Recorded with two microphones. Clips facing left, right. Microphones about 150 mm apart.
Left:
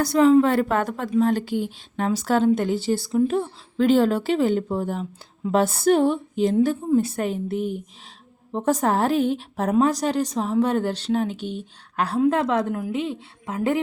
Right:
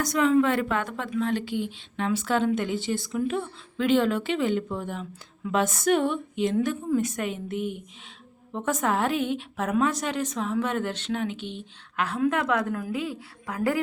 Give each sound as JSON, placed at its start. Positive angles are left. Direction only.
{"t": 0.0, "sound": "a woman's voice", "side_deg": 30}